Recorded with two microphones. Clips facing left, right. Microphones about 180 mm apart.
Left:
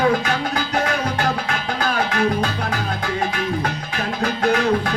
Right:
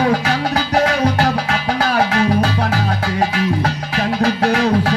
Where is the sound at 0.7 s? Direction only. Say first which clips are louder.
Right 7 dB; 35° right (ahead or behind).